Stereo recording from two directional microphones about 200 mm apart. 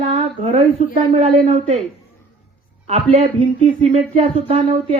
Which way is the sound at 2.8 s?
35° right (ahead or behind).